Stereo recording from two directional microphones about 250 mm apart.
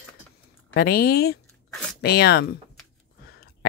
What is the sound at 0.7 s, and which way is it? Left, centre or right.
Speech, left.